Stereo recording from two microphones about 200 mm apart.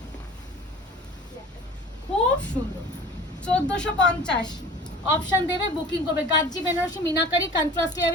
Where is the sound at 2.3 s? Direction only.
5° left (ahead or behind).